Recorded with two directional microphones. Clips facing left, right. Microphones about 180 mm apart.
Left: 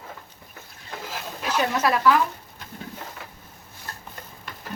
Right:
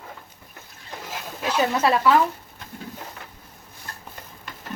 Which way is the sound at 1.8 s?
25° right (ahead or behind).